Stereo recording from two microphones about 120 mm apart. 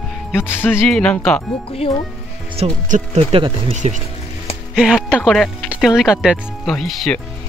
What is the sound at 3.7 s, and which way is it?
Speech, 90° right.